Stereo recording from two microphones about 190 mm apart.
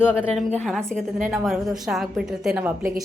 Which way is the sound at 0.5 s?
5° left (ahead or behind).